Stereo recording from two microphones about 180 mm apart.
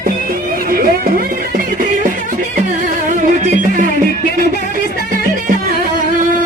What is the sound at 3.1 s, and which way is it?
Music, 45° right (ahead or behind).